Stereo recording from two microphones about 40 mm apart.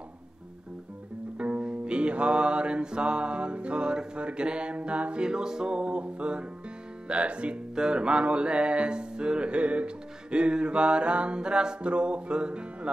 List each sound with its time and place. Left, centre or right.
1.6 s music: right
5.2 s music: centre
5.8 s music: right